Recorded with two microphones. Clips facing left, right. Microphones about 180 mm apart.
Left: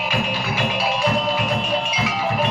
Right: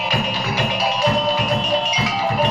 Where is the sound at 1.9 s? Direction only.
40° right (ahead or behind).